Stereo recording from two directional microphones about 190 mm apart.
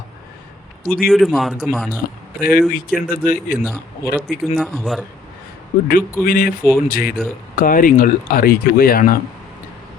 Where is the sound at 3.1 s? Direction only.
45° left (ahead or behind).